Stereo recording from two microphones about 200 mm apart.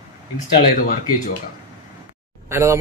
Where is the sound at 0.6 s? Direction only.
40° left (ahead or behind).